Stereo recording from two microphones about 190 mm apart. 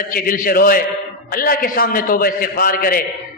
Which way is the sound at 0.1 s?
50° left (ahead or behind).